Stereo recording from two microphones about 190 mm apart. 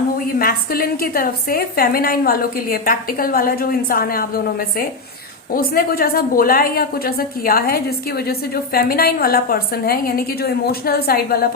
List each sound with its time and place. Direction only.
0.3 s a woman's voice: 50° left (ahead or behind)
5.5 s a woman's voice: 50° left (ahead or behind)